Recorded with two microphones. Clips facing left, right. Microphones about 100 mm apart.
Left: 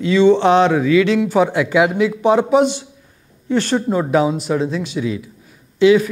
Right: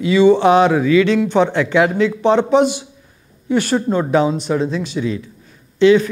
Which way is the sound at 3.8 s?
5° left (ahead or behind).